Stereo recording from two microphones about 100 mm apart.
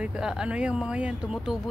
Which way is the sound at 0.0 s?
10° right (ahead or behind).